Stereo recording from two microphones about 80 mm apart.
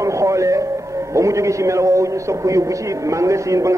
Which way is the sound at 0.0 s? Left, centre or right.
Right.